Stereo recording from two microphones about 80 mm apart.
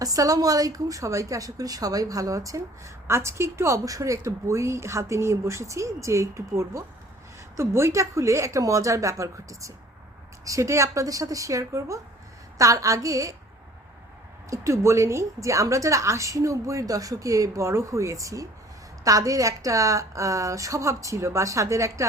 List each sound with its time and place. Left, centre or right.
0.0 s a woman's voice: right
14.5 s a woman's voice: right